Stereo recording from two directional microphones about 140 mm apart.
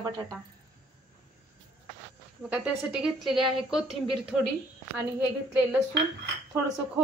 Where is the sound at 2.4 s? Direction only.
10° right (ahead or behind).